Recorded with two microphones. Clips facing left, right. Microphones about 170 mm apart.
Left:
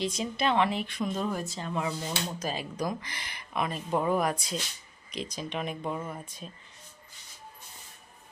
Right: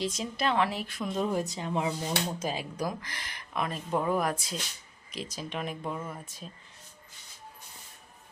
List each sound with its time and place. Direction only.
0.0 s speech: centre (ahead or behind)
1.2 s speech: 20° right (ahead or behind)
2.5 s speech: 10° right (ahead or behind); by 6.2 s 5° left (ahead or behind)